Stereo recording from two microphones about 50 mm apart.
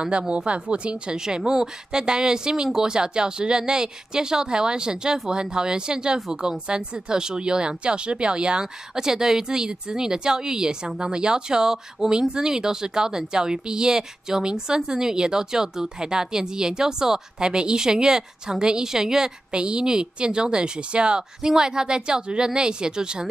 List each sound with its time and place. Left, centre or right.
0.5 s speech: right